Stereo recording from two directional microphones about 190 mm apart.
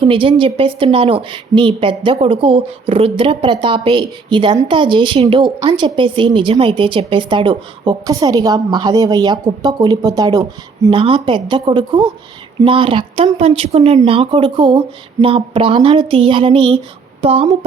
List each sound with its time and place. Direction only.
0.0 s a woman's voice: 25° right (ahead or behind)